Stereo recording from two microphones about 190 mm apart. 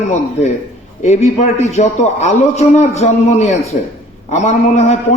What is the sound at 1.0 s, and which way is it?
A man's voice, 35° left (ahead or behind).